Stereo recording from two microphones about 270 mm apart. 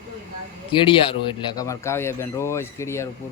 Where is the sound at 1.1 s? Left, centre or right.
Centre.